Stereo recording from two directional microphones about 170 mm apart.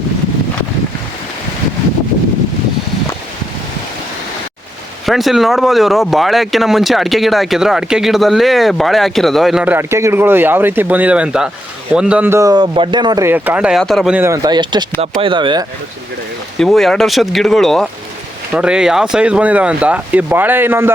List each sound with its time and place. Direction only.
5.0 s a man's voice: centre (ahead or behind); by 13.2 s 25° right (ahead or behind)
13.2 s speech: 10° right (ahead or behind)
14.2 s a man's voice: 15° right (ahead or behind)
16.6 s speech: centre (ahead or behind)